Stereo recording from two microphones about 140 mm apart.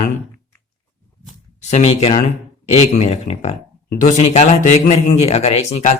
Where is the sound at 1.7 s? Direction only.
50° left (ahead or behind).